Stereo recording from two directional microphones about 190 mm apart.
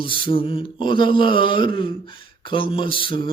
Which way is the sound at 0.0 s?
25° left (ahead or behind).